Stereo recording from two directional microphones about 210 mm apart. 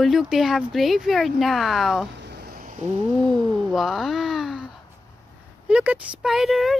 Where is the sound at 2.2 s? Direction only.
50° right (ahead or behind).